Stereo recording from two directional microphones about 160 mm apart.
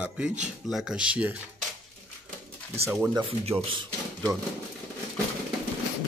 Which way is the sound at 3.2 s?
35° right (ahead or behind).